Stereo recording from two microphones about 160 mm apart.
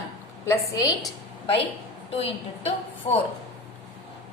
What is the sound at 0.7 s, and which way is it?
Speech, 20° left (ahead or behind).